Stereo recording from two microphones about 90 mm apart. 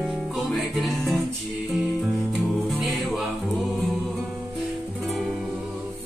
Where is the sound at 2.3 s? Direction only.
Centre (ahead or behind).